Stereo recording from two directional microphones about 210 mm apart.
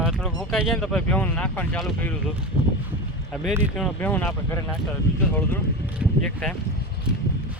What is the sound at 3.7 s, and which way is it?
Speech, 5° left (ahead or behind).